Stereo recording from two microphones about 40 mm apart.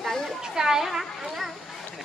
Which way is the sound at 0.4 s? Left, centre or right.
Centre.